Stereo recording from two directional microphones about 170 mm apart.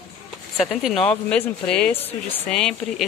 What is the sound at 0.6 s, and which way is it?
Speech, centre (ahead or behind).